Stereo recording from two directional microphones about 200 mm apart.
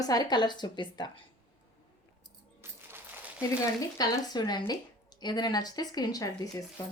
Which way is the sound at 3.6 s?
20° left (ahead or behind).